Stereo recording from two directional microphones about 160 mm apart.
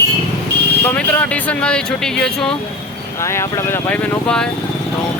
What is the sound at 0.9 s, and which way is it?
Speech, 10° left (ahead or behind).